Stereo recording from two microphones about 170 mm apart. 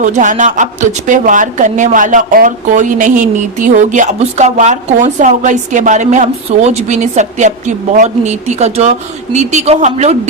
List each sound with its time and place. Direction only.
0.0 s a woman's voice: 45° right (ahead or behind)